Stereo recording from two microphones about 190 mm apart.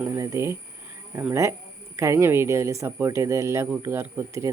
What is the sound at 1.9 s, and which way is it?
Speech, 15° right (ahead or behind).